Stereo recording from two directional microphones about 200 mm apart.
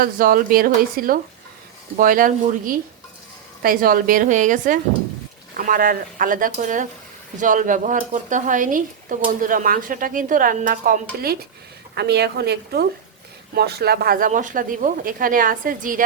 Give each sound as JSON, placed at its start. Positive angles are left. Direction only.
{"t": 0.0, "sound": "speech", "side_deg": -45}